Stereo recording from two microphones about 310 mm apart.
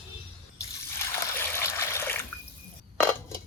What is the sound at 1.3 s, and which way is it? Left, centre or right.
Water, centre.